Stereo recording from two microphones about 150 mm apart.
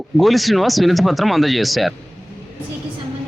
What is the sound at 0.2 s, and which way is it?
Speech, centre (ahead or behind).